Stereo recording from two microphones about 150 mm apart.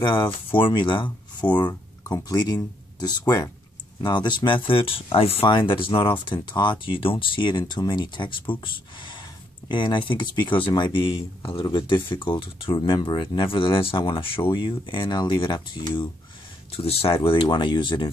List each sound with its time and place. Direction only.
0.0 s speech: 30° left (ahead or behind)